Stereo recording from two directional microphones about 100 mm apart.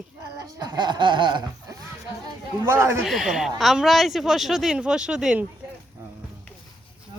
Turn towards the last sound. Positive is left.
turn(degrees=-10)  # may be behind; listen again after turning